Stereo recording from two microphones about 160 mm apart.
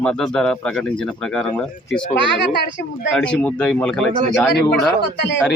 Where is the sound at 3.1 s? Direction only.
5° left (ahead or behind).